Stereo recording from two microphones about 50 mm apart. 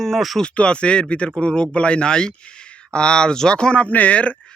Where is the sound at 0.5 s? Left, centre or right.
Left.